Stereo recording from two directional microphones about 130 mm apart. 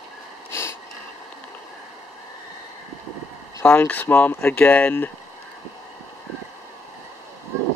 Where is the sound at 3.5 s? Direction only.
15° left (ahead or behind).